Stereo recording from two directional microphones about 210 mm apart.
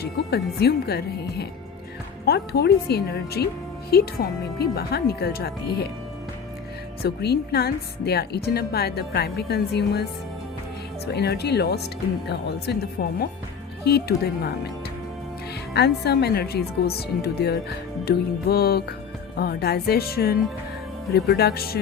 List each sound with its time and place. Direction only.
0.0 s a woman's voice: 50° left (ahead or behind)
7.0 s a woman's voice: 50° left (ahead or behind)
15.7 s a woman's voice: 50° left (ahead or behind)